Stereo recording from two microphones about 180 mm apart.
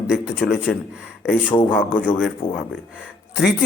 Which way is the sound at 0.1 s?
Centre (ahead or behind).